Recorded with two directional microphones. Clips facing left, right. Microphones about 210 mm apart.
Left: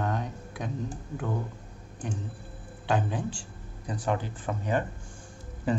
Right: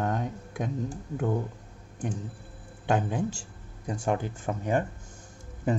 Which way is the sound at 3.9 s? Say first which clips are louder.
Right 2 dB; 45° right (ahead or behind).